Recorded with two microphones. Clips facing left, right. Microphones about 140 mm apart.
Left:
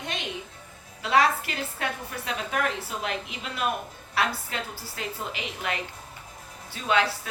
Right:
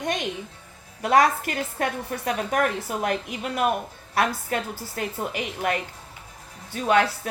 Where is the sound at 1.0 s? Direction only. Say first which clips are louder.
Right 3 dB; 50° right (ahead or behind).